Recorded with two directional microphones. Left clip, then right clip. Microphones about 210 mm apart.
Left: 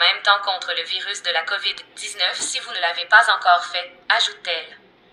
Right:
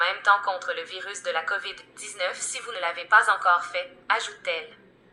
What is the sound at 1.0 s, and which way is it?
A woman's voice, 35° left (ahead or behind).